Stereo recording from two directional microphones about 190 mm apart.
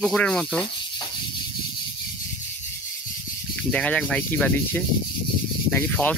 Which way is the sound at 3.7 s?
5° left (ahead or behind).